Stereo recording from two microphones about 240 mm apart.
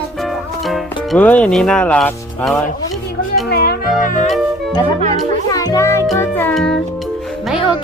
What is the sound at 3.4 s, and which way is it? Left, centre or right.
Music, left.